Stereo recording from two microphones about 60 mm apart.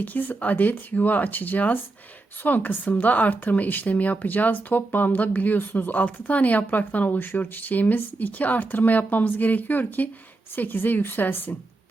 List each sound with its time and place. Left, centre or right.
0.0 s a woman's voice: left